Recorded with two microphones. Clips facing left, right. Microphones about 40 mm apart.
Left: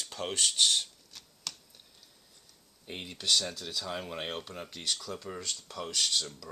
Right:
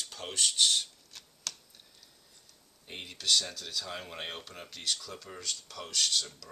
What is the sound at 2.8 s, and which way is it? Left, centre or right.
Speech, centre.